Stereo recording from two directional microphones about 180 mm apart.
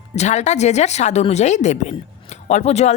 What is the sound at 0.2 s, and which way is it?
Speech, 40° left (ahead or behind).